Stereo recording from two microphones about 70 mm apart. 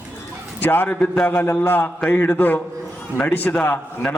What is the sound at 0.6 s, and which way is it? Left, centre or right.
A man's voice, left.